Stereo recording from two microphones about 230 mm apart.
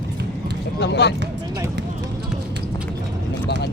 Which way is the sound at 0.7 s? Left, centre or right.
Left.